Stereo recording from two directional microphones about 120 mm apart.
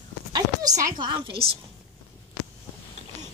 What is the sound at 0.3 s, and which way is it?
Speech, 30° right (ahead or behind).